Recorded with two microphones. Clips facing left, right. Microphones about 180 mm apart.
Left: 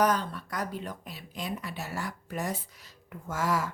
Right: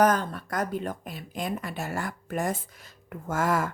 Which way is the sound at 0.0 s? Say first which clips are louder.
Right 4 dB; 50° right (ahead or behind).